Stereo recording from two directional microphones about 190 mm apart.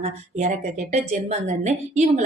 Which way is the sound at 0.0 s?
35° right (ahead or behind).